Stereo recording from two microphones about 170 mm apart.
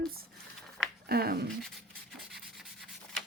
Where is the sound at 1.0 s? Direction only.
65° right (ahead or behind).